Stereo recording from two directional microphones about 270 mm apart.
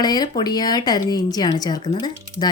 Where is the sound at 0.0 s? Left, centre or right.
Centre.